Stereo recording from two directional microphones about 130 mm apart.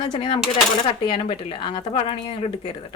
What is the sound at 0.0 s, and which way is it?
Speech, 40° left (ahead or behind).